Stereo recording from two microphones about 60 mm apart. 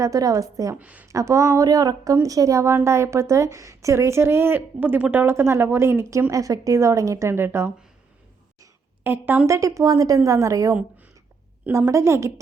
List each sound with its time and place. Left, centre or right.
0.0 s a woman's voice: right
0.8 s a woman's voice: right
1.0 s a woman's voice: right
5.1 s speech: right
6.3 s a woman's voice: right
9.0 s a woman's voice: right
9.5 s a woman's voice: right
11.9 s speech: right